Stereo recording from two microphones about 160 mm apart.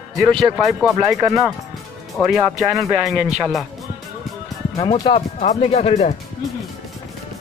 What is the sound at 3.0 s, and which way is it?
Speech, 5° right (ahead or behind).